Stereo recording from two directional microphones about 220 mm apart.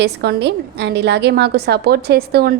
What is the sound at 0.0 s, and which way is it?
A woman's voice, 50° right (ahead or behind).